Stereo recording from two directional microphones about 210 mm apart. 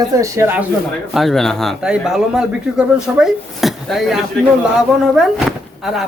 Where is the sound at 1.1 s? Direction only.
Centre (ahead or behind).